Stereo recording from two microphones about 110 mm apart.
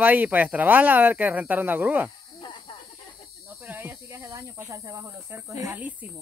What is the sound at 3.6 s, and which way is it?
Snake, 20° right (ahead or behind).